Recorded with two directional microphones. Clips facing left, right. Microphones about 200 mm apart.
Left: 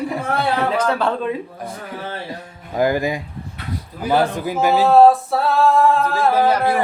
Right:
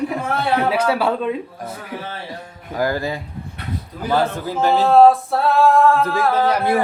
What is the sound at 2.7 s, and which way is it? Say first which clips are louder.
Speech: left 3 dB; 20° left (ahead or behind).